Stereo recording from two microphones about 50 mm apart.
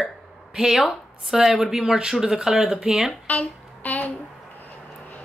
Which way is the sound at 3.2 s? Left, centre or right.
Left.